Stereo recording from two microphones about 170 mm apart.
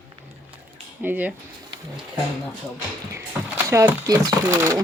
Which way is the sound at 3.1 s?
15° right (ahead or behind).